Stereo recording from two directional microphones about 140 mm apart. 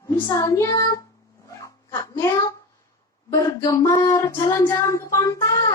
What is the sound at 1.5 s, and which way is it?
Dog, 25° left (ahead or behind).